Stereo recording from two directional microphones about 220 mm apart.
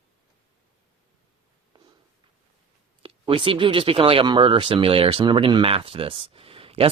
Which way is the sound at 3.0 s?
25° right (ahead or behind).